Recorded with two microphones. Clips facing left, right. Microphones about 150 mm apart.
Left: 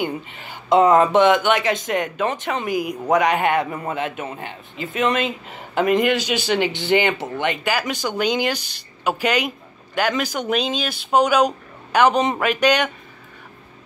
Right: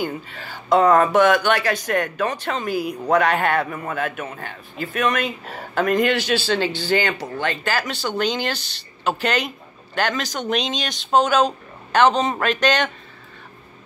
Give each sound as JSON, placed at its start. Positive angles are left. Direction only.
{"t": 0.0, "sound": "speech", "side_deg": 20}